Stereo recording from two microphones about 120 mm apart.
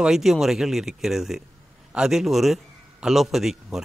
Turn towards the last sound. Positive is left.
turn(degrees=-5)  # may be behind; listen again after turning